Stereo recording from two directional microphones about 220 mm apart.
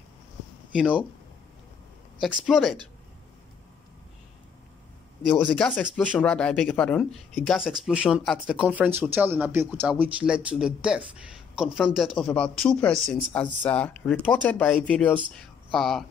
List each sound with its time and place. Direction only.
0.7 s speech: 5° right (ahead or behind)
2.1 s speech: centre (ahead or behind)
5.2 s speech: 5° left (ahead or behind)